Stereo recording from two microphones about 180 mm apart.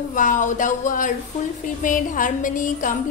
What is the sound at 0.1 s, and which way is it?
A woman's voice, 45° left (ahead or behind).